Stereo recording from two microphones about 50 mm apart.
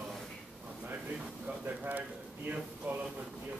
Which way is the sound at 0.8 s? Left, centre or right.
Right.